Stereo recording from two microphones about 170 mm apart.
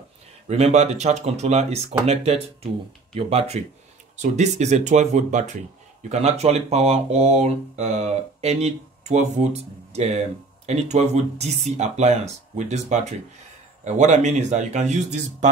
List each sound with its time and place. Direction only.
0.5 s speech: 40° right (ahead or behind)